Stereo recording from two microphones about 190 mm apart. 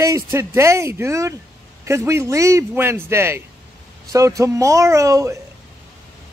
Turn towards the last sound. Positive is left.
turn(degrees=-15)  # may be behind; listen again after turning